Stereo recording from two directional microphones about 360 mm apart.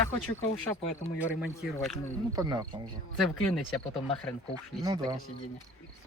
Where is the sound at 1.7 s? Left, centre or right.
Centre.